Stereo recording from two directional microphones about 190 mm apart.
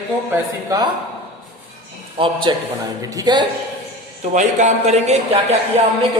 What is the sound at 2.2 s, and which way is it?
Speech, 25° right (ahead or behind).